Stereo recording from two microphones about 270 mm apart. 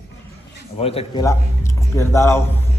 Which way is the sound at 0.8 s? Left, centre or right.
Left.